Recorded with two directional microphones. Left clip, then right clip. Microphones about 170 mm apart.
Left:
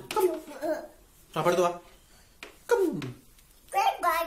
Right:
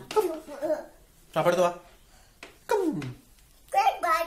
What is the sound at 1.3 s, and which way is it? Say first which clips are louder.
Speech: right 2 dB; 30° right (ahead or behind).